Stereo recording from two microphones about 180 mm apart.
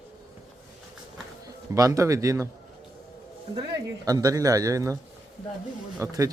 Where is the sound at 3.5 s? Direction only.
20° right (ahead or behind).